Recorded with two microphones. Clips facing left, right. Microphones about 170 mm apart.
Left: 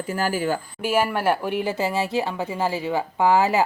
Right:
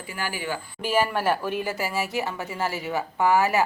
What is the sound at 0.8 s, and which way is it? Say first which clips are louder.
Speech: left 1 dB; 10° left (ahead or behind).